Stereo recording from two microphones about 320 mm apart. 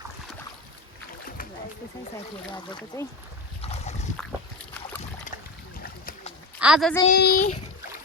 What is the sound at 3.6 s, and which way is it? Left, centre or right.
Boat, centre.